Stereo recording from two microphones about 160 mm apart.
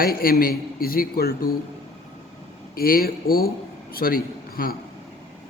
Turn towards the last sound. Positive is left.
turn(degrees=65)  # may be behind; listen again after turning